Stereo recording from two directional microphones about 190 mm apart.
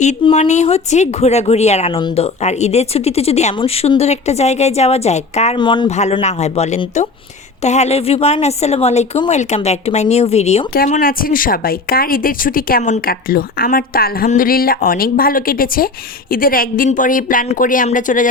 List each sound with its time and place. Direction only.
0.0 s speech: 35° left (ahead or behind)
5.5 s speech: 25° left (ahead or behind)
5.9 s speech: 35° left (ahead or behind)